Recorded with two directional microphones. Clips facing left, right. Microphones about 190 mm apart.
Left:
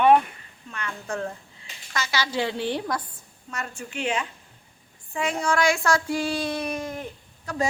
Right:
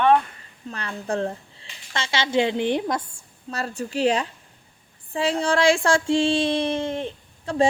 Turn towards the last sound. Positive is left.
turn(degrees=-25)  # may be behind; listen again after turning